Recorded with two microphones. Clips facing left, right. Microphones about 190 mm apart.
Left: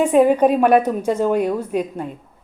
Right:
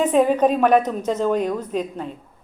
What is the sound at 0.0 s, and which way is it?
A woman's voice, 10° left (ahead or behind).